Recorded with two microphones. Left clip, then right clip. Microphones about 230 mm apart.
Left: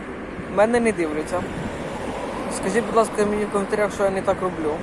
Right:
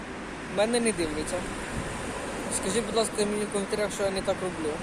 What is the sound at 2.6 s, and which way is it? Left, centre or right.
Speech, centre.